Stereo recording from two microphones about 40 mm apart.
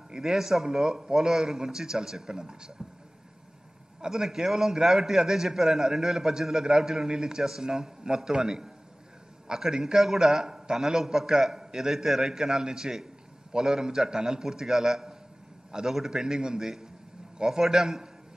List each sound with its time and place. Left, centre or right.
0.2 s a man's voice: centre
4.0 s a man's voice: centre